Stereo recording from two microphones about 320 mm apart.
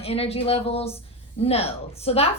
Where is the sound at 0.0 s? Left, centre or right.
Centre.